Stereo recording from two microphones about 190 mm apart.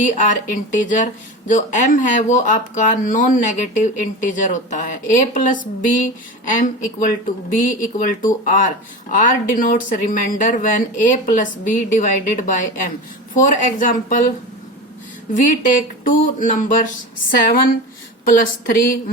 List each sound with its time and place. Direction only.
0.0 s speech: 40° left (ahead or behind)
15.4 s speech: 45° left (ahead or behind)
18.3 s speech: 45° left (ahead or behind)